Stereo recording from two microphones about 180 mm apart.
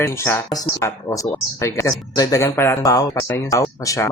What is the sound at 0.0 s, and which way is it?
Speech, 15° left (ahead or behind).